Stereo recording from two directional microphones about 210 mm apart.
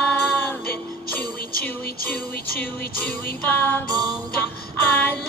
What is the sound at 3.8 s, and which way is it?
Music, 20° right (ahead or behind).